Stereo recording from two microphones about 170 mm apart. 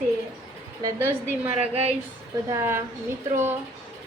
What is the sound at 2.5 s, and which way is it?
A woman's voice, 15° right (ahead or behind).